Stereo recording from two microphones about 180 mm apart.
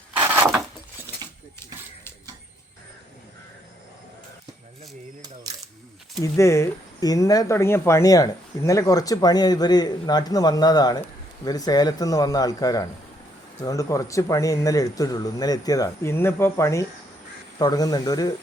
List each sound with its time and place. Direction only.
0.2 s a sound: 15° right (ahead or behind)
5.2 s camera: 20° right (ahead or behind)
6.2 s speech: 15° left (ahead or behind)